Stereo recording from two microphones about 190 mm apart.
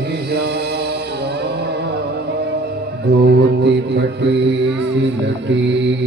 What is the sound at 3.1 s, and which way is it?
Music, 60° right (ahead or behind).